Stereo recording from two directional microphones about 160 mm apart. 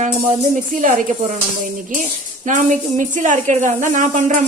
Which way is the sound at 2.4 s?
50° right (ahead or behind).